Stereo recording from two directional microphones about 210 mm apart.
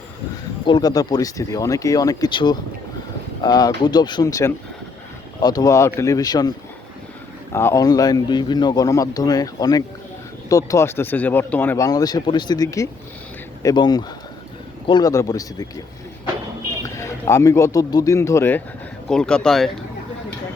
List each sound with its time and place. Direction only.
0.6 s speech: 20° left (ahead or behind)
7.5 s speech: 15° left (ahead or behind)
16.8 s speech: 15° left (ahead or behind)